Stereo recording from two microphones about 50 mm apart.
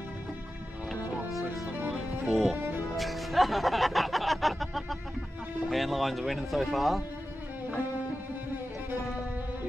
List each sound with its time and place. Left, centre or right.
1.9 s music: centre
3.0 s music: centre
5.7 s speech: centre